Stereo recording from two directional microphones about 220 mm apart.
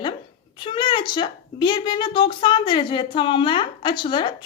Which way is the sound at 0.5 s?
20° left (ahead or behind).